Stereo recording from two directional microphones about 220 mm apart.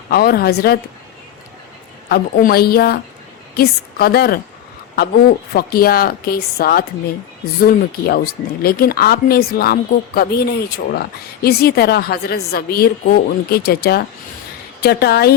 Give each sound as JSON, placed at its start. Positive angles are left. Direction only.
{"t": 0.1, "sound": "a woman's voice", "side_deg": 45}
{"t": 2.0, "sound": "a woman's voice", "side_deg": 45}